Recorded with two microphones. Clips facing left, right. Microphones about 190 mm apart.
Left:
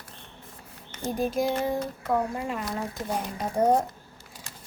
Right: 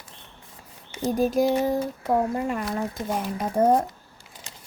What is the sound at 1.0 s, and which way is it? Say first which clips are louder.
A child's voice: right 5 dB; 40° right (ahead or behind).